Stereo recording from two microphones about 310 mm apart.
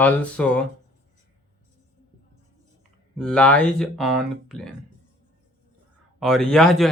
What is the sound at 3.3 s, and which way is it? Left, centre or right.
Speech, centre.